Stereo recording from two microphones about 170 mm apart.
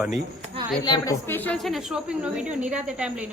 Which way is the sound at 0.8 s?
25° left (ahead or behind).